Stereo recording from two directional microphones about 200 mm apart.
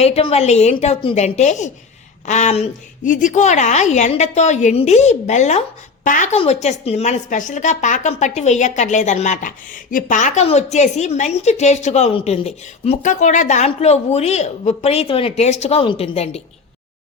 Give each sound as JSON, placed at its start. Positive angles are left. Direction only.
{"t": 0.0, "sound": "a woman's voice", "side_deg": 30}